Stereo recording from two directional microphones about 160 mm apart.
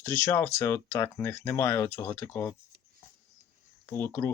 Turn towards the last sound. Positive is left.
turn(degrees=15)  # may be behind; listen again after turning